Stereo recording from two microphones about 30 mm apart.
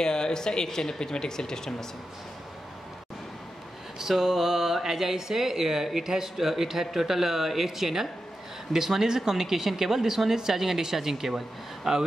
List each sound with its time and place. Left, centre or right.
0.0 s speech: left
4.0 s a woman's voice: centre